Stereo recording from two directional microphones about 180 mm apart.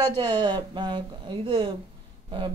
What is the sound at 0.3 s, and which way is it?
Speech, 25° right (ahead or behind).